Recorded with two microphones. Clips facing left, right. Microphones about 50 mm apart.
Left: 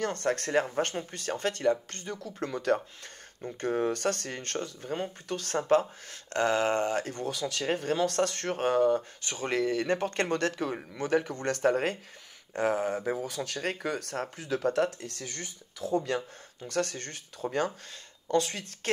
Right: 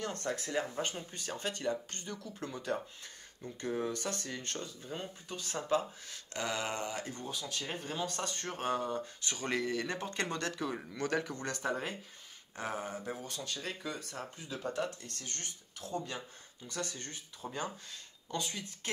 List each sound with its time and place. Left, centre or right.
0.0 s speech: left
0.5 s speech: left
3.6 s speech: left
10.7 s speech: left
11.5 s speech: left
16.1 s speech: left
16.6 s speech: left